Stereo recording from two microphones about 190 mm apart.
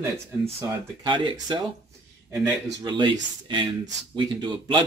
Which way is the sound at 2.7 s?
25° right (ahead or behind).